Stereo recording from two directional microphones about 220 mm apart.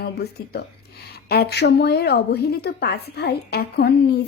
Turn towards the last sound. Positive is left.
turn(degrees=45)  # may be behind; listen again after turning